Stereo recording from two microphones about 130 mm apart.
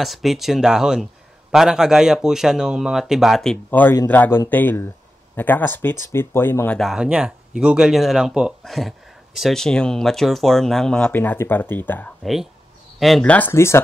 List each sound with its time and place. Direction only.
0.0 s speech: centre (ahead or behind)
3.7 s a man's voice: 15° left (ahead or behind)
6.8 s speech: 5° right (ahead or behind); by 12.1 s 15° left (ahead or behind)
12.2 s a man's voice: centre (ahead or behind); by 13.7 s 20° left (ahead or behind)